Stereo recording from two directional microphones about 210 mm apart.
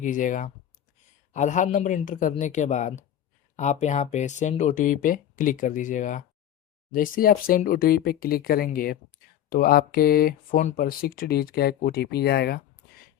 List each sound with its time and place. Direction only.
0.0 s speech: 40° left (ahead or behind)